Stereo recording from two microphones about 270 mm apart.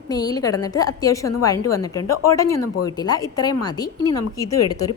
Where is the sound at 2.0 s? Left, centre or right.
Left.